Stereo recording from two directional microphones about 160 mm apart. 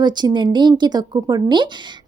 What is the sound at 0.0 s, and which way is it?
Speech, 25° right (ahead or behind).